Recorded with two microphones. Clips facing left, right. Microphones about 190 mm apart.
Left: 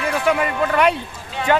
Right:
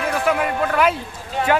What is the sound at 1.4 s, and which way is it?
Speech, 45° right (ahead or behind).